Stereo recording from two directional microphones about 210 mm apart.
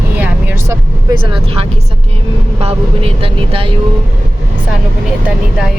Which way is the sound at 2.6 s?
25° right (ahead or behind).